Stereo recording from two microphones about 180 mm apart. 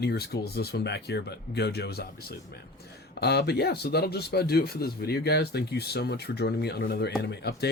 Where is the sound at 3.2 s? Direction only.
65° left (ahead or behind).